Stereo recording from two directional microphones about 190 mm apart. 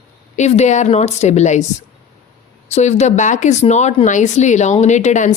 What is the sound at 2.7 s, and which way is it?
Speech, 35° left (ahead or behind).